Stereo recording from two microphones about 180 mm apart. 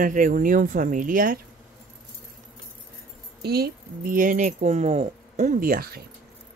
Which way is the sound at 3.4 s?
60° right (ahead or behind).